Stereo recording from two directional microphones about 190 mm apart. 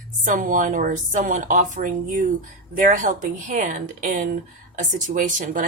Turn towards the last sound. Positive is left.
turn(degrees=-40)  # may be behind; listen again after turning